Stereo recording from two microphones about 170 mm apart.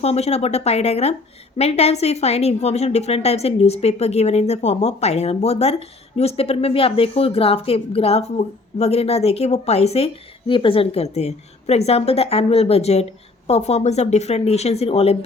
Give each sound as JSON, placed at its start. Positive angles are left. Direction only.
{"t": 0.0, "sound": "a woman's voice", "side_deg": 35}